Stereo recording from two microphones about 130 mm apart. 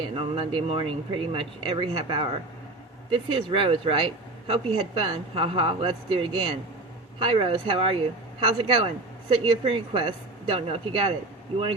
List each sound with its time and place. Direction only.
0.2 s speech: 45° right (ahead or behind)